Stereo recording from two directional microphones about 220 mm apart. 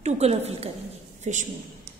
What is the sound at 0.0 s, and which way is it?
A woman's voice, 30° right (ahead or behind).